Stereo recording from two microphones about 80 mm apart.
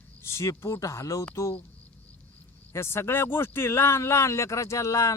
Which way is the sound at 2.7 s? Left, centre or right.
Left.